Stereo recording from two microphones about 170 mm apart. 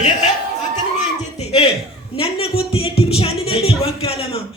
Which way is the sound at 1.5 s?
35° left (ahead or behind).